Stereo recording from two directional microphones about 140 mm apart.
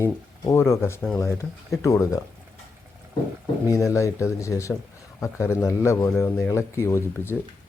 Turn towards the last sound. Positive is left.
turn(degrees=20)  # may be behind; listen again after turning